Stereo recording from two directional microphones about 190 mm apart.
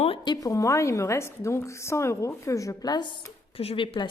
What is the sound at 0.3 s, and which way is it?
A woman's voice, 20° left (ahead or behind).